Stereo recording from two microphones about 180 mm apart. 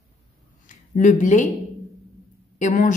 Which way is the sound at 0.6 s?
45° left (ahead or behind).